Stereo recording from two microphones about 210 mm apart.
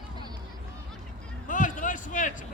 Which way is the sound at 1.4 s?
40° left (ahead or behind).